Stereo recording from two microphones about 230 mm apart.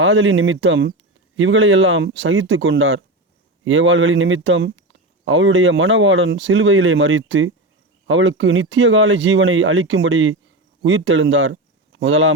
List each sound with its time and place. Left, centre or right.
0.0 s speech: right